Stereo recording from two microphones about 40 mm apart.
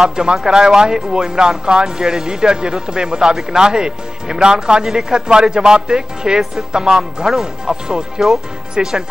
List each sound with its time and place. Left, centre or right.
0.0 s speech: centre